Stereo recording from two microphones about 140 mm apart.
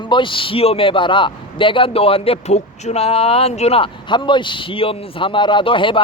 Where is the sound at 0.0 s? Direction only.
35° left (ahead or behind).